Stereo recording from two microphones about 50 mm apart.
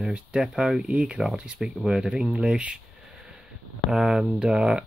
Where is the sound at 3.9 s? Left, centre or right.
Centre.